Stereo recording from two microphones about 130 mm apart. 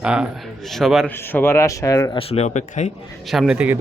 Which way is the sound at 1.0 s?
15° left (ahead or behind).